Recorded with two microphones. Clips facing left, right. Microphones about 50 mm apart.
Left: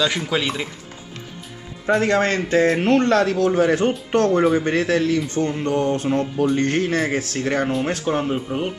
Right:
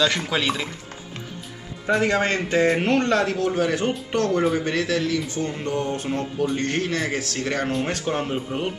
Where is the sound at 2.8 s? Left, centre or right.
Left.